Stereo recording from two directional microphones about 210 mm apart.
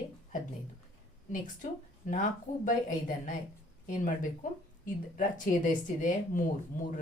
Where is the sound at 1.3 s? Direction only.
40° left (ahead or behind).